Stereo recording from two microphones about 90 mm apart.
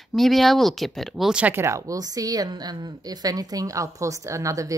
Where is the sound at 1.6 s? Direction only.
35° right (ahead or behind).